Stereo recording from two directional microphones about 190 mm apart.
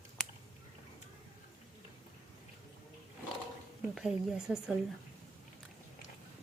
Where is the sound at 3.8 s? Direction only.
Centre (ahead or behind).